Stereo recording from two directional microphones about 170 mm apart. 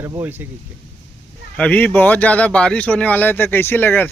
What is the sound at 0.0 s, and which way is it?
Speech, 15° right (ahead or behind).